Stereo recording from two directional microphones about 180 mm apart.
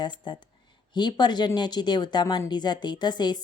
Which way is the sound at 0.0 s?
25° left (ahead or behind).